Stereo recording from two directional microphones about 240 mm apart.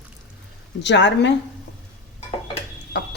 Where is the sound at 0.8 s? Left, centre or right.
Left.